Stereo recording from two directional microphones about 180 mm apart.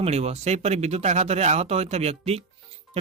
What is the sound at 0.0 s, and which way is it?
Speech, 35° right (ahead or behind).